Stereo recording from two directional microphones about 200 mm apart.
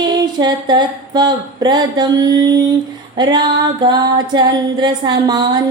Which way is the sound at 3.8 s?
20° right (ahead or behind).